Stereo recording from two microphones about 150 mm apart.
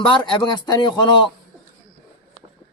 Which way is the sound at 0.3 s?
30° left (ahead or behind).